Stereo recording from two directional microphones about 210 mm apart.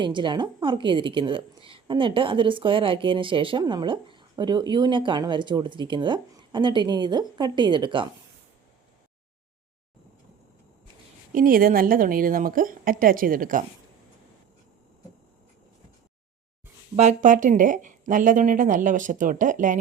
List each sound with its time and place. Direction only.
0.0 s a woman's voice: 20° right (ahead or behind)
11.3 s speech: 40° right (ahead or behind)
16.9 s speech: 35° right (ahead or behind)